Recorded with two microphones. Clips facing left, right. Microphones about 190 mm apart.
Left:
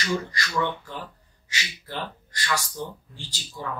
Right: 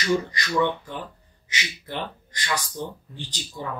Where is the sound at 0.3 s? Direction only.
20° right (ahead or behind).